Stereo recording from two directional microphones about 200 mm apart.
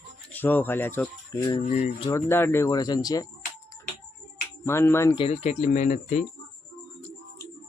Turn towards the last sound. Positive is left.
turn(degrees=40)  # may be behind; listen again after turning